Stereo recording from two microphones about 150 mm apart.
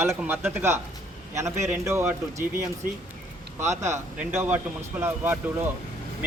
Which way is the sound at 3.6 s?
20° right (ahead or behind).